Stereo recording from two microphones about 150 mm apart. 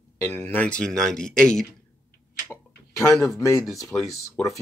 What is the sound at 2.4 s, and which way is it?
Speech, 15° left (ahead or behind).